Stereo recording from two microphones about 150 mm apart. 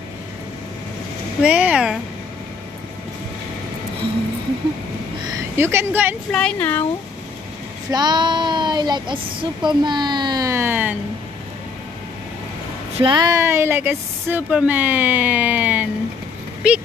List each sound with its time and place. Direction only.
1.4 s speech: 10° right (ahead or behind)
5.6 s speech: 15° right (ahead or behind)
6.3 s speech: 10° left (ahead or behind)
7.9 s speech: 30° right (ahead or behind); by 11.0 s 10° right (ahead or behind)
12.9 s speech: 35° right (ahead or behind); by 16.8 s 10° right (ahead or behind)